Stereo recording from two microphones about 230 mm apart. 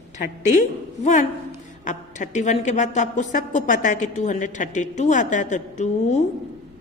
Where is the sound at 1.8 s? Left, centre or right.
Left.